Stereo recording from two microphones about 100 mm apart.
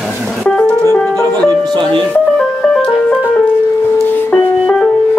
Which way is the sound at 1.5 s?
50° right (ahead or behind).